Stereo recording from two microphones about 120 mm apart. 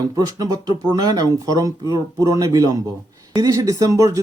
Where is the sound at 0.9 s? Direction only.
30° right (ahead or behind).